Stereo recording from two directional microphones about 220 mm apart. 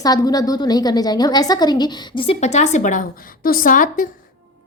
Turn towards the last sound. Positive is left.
turn(degrees=40)  # may be behind; listen again after turning